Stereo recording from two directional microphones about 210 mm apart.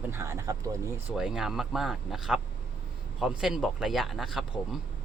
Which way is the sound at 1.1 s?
5° right (ahead or behind).